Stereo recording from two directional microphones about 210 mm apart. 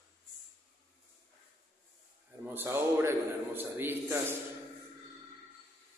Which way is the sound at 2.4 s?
10° right (ahead or behind).